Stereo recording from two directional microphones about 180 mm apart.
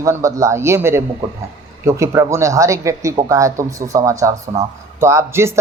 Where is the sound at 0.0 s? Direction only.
15° right (ahead or behind).